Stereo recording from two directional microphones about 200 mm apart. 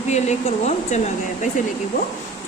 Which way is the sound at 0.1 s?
35° left (ahead or behind).